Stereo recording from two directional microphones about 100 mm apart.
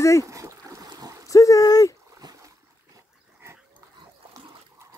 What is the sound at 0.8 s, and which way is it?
Splash, 40° right (ahead or behind).